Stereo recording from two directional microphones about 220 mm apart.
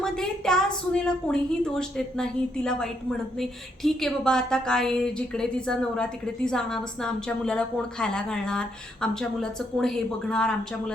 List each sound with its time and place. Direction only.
0.0 s a woman's voice: centre (ahead or behind)